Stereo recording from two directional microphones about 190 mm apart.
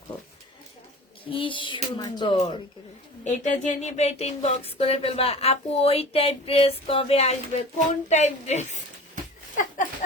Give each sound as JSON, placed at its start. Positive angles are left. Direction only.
{"t": 1.3, "sound": "a woman's voice", "side_deg": 25}
{"t": 3.2, "sound": "speech", "side_deg": 40}